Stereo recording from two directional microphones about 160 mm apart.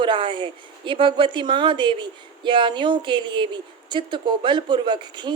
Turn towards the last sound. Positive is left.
turn(degrees=-30)  # may be behind; listen again after turning